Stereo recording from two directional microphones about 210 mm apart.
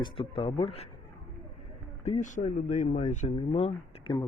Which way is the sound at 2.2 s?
35° left (ahead or behind).